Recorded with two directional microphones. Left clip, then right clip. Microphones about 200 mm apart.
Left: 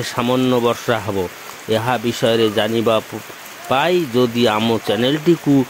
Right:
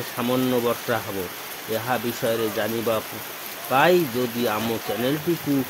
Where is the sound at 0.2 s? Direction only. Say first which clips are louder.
Left 6 dB; 35° left (ahead or behind).